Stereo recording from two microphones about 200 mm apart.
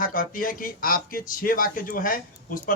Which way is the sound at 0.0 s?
45° left (ahead or behind).